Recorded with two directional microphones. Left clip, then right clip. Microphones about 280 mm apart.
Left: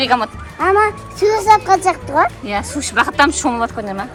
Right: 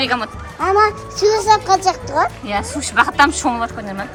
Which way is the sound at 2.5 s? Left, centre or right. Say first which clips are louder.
Even; centre.